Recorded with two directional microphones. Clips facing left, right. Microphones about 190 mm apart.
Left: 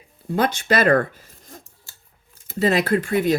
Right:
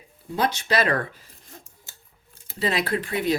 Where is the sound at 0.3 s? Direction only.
50° left (ahead or behind).